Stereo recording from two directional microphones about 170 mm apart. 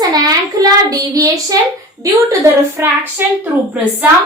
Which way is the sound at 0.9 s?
20° right (ahead or behind).